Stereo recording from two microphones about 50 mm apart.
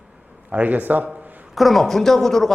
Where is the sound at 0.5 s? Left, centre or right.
Right.